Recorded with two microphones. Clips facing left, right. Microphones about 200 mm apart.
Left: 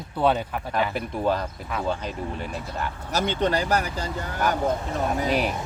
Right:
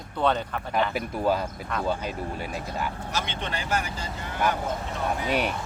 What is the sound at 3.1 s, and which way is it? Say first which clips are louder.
Speech: left 8 dB; 40° left (ahead or behind).